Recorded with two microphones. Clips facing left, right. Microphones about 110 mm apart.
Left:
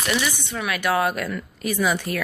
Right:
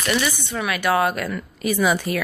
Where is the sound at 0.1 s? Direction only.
Centre (ahead or behind).